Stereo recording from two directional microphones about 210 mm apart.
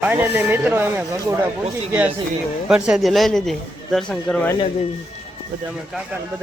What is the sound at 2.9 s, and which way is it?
A man's voice, centre (ahead or behind).